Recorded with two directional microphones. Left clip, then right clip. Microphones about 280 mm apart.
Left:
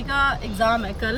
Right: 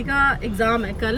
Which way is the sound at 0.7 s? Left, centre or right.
Left.